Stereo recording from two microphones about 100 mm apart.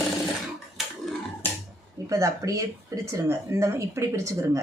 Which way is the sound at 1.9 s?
35° right (ahead or behind).